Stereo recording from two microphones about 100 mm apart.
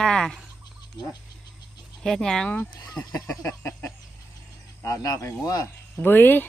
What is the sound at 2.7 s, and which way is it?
Speech, 40° left (ahead or behind).